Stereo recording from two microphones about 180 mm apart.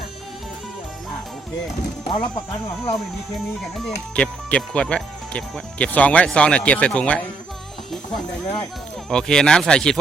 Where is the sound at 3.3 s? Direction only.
Centre (ahead or behind).